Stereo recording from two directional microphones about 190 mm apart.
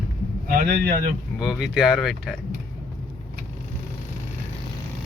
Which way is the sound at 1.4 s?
Centre (ahead or behind).